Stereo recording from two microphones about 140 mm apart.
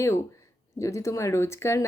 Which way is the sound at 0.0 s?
20° left (ahead or behind).